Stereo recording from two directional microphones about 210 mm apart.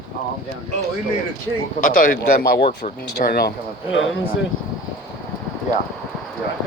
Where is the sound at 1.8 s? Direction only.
40° left (ahead or behind); by 4.0 s 55° left (ahead or behind).